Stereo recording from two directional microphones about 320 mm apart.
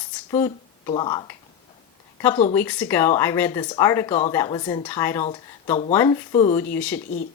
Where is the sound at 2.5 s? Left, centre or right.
Centre.